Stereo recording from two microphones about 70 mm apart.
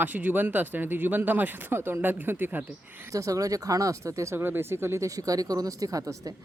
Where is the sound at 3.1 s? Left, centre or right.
Right.